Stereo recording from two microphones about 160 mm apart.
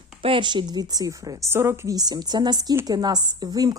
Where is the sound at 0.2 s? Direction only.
35° right (ahead or behind).